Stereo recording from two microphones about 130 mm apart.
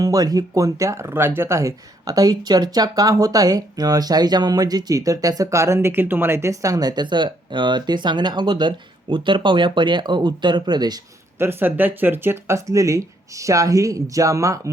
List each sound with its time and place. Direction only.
0.0 s speech: 30° right (ahead or behind)
11.3 s speech: 15° right (ahead or behind)